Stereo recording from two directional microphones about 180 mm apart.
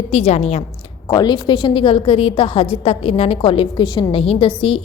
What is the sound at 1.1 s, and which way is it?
A woman's voice, 20° left (ahead or behind).